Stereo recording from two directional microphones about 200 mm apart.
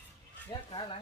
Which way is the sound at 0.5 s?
20° left (ahead or behind).